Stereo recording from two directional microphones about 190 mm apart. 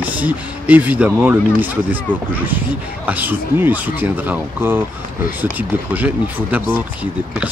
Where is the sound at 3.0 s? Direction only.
10° right (ahead or behind).